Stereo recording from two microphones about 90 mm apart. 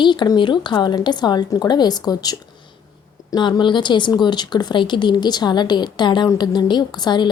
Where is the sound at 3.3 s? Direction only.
60° left (ahead or behind).